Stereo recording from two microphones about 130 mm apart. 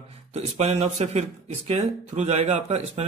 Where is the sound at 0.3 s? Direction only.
55° right (ahead or behind).